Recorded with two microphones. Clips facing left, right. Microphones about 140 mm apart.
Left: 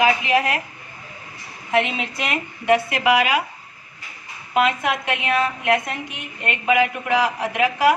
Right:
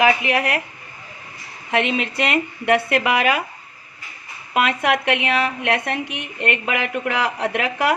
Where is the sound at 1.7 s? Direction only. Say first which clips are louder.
Right 1 dB; 65° right (ahead or behind).